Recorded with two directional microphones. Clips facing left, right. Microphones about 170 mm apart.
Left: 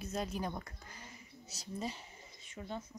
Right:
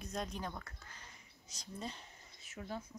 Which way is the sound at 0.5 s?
15° left (ahead or behind).